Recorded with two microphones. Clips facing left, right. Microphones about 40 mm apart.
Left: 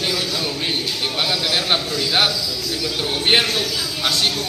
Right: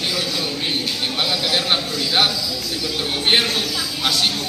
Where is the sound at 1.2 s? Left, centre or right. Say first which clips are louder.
Even; centre.